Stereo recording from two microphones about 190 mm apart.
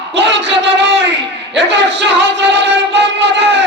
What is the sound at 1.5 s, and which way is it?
Music, 65° right (ahead or behind).